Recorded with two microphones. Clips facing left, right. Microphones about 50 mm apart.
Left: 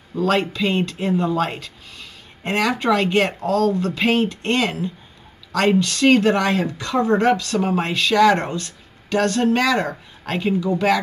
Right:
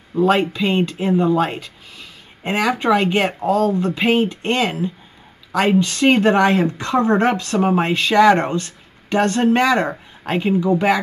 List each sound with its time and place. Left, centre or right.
0.1 s speech: centre